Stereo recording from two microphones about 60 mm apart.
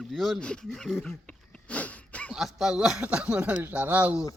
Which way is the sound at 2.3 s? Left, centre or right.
Centre.